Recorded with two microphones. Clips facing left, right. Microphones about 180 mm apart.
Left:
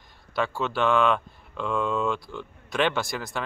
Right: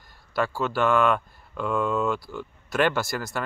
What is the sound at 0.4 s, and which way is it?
Speech, centre (ahead or behind).